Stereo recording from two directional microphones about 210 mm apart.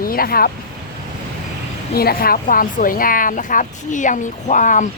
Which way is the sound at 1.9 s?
45° left (ahead or behind).